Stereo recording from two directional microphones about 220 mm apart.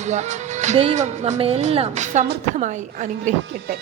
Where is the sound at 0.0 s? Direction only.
30° right (ahead or behind).